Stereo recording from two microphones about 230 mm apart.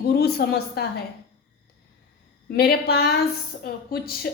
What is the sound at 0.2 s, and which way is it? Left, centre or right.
Speech, left.